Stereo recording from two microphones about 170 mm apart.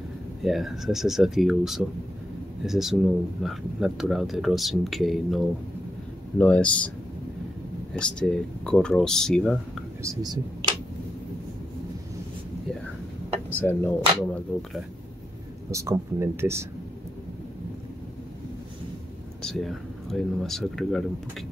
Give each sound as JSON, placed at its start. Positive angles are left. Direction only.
{"t": 0.4, "sound": "speech", "side_deg": 0}
{"t": 7.9, "sound": "speech", "side_deg": 5}
{"t": 10.0, "sound": "speech", "side_deg": -20}
{"t": 13.6, "sound": "speech", "side_deg": 10}
{"t": 15.7, "sound": "speech", "side_deg": -15}
{"t": 19.4, "sound": "speech", "side_deg": 0}